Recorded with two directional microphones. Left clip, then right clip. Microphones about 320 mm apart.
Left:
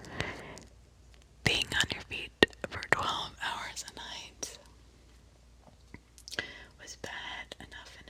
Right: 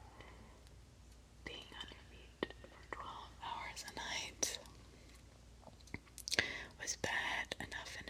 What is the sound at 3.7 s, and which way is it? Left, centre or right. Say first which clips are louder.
Whispering: left 2 dB; centre.